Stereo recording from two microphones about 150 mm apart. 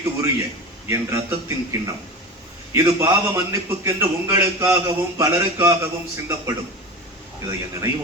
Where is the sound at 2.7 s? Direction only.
25° right (ahead or behind).